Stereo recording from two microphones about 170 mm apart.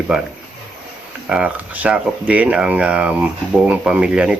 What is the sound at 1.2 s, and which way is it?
Speech, 5° right (ahead or behind).